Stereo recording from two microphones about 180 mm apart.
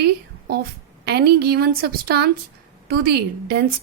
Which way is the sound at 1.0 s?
65° right (ahead or behind).